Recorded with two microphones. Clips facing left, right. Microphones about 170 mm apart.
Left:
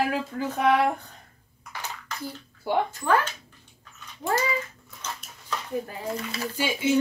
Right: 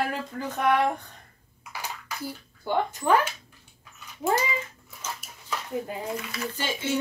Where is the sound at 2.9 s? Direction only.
20° right (ahead or behind).